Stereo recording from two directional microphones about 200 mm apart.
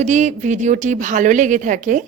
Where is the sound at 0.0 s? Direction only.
35° right (ahead or behind).